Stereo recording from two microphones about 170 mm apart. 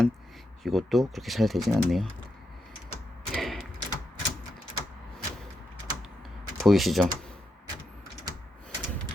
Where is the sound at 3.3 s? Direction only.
Centre (ahead or behind).